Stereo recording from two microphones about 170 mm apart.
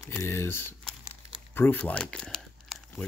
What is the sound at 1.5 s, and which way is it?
Crumpling, 10° left (ahead or behind).